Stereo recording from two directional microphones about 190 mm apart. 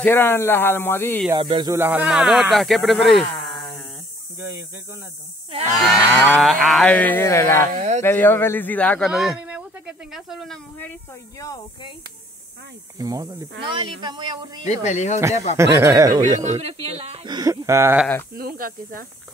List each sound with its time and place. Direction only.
0.0 s speech: 10° left (ahead or behind)
1.3 s speech: 25° right (ahead or behind)
1.8 s speech: 10° right (ahead or behind)
5.9 s speech: centre (ahead or behind)
7.7 s speech: 40° right (ahead or behind)
8.0 s speech: 10° left (ahead or behind)
9.1 s a sound: 5° right (ahead or behind)
11.3 s speech: 15° left (ahead or behind)
12.9 s speech: 20° right (ahead or behind)
14.6 s speech: 40° left (ahead or behind)
15.5 s speech: 15° right (ahead or behind)
16.4 s speech: 35° right (ahead or behind); by 18.0 s 10° right (ahead or behind)
18.3 s speech: 50° right (ahead or behind)